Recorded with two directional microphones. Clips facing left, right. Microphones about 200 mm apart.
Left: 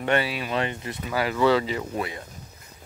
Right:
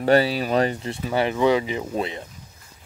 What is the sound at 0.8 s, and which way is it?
Speech, 25° right (ahead or behind).